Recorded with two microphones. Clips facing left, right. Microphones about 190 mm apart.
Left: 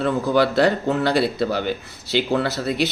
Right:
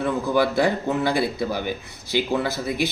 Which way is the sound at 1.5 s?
15° right (ahead or behind).